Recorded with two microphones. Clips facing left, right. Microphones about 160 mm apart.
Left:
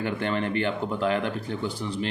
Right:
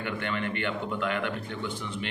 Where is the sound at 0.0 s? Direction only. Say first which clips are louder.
Left 5 dB; 35° left (ahead or behind).